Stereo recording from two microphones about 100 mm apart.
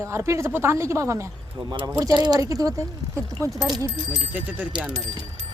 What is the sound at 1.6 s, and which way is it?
Speech, 40° right (ahead or behind).